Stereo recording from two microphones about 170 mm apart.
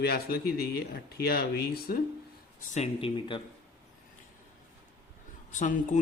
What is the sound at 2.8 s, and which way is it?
Speech, 30° left (ahead or behind).